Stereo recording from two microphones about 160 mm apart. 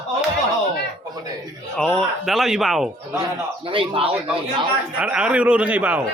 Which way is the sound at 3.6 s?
35° right (ahead or behind).